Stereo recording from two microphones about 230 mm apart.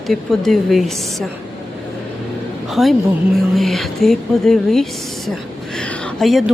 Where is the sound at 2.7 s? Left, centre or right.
Centre.